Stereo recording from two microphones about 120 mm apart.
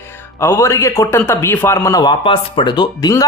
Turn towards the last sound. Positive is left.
turn(degrees=30)  # may be behind; listen again after turning